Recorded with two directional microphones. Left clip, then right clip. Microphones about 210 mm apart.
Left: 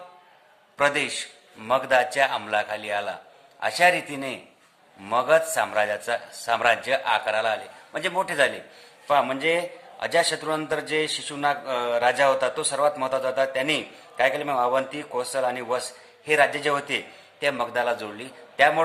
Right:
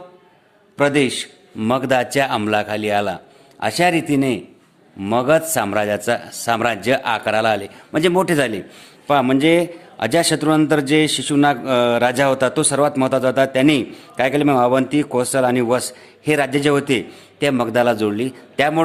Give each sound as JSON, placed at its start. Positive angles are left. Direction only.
{"t": 0.8, "sound": "a man's voice", "side_deg": -35}